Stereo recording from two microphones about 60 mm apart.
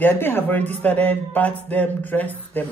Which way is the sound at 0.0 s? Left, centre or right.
Left.